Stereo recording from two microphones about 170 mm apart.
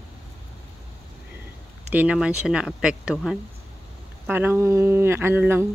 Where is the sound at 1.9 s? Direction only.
10° right (ahead or behind).